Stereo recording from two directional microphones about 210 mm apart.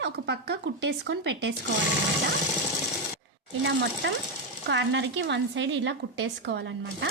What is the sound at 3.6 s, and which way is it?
Speech, 55° right (ahead or behind).